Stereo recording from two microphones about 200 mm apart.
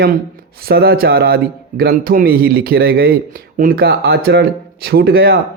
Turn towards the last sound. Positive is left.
turn(degrees=-50)  # may be behind; listen again after turning